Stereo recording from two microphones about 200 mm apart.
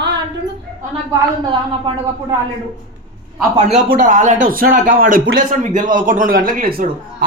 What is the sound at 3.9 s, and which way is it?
A man's voice, 40° right (ahead or behind).